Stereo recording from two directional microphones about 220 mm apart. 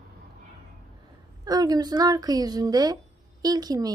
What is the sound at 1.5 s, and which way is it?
Speech, 15° right (ahead or behind).